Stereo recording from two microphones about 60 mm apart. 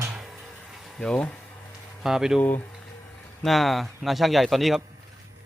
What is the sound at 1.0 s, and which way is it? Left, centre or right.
Speech, centre.